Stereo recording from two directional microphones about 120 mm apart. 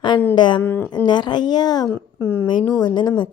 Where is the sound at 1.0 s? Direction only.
35° left (ahead or behind).